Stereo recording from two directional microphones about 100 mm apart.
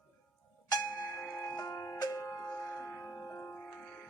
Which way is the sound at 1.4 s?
35° left (ahead or behind).